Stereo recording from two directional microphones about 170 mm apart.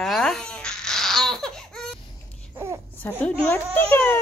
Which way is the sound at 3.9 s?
10° left (ahead or behind).